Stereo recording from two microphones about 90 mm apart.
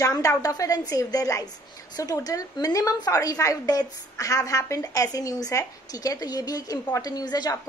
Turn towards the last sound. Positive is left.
turn(degrees=50)  # may be behind; listen again after turning